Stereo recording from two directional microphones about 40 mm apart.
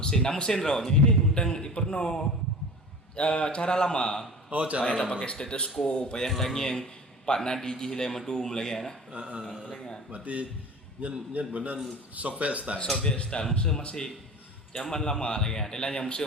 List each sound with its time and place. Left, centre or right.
0.0 s a man's voice: centre
4.4 s a man's voice: right
4.9 s a man's voice: left
6.3 s a man's voice: centre
9.1 s speech: right
13.0 s a man's voice: left